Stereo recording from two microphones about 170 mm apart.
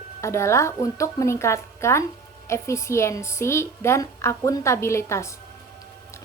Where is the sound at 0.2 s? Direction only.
15° left (ahead or behind).